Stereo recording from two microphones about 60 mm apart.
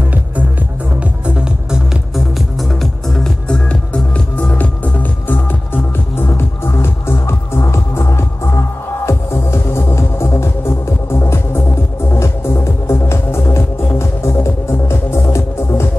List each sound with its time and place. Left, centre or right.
1.2 s music: centre
3.4 s music: centre
6.1 s music: left